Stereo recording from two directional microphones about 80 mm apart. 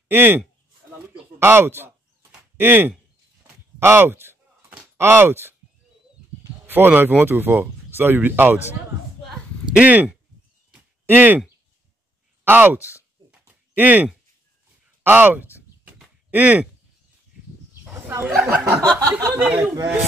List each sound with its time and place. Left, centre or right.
0.1 s speech: right
1.4 s speech: right
3.8 s a sound: right
4.9 s speech: right
6.7 s speech: right
9.8 s speech: centre
11.1 s speech: right
12.4 s a sound: right
15.0 s speech: right
15.9 s a sound: right
18.4 s speech: right